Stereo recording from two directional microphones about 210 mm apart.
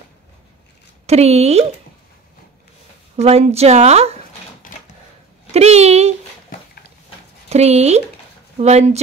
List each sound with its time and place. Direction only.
1.0 s a woman's voice: 30° right (ahead or behind)
3.2 s a woman's voice: 30° right (ahead or behind)
5.5 s a woman's voice: 30° right (ahead or behind)
7.4 s a woman's voice: 30° right (ahead or behind)